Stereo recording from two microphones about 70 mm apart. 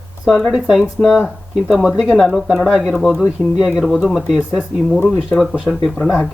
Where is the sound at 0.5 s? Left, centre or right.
Centre.